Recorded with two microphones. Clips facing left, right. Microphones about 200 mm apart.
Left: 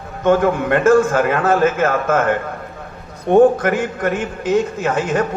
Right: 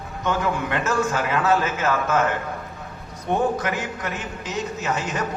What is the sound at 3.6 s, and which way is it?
A man's voice, 50° left (ahead or behind).